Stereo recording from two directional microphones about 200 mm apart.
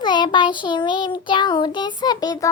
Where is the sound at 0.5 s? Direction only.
25° left (ahead or behind).